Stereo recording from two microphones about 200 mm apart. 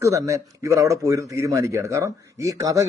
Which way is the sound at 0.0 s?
15° right (ahead or behind).